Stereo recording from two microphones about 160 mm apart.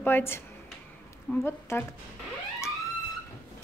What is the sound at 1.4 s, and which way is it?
Speech, 15° left (ahead or behind).